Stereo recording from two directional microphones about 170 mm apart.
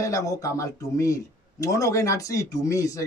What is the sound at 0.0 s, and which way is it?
A man's voice, 20° left (ahead or behind).